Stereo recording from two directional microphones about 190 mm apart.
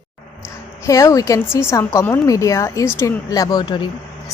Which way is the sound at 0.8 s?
15° left (ahead or behind).